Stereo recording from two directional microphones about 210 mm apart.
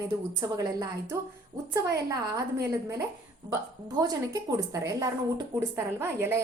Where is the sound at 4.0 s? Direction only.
15° right (ahead or behind).